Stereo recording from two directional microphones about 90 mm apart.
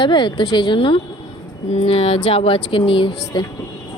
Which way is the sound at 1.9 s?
90° left.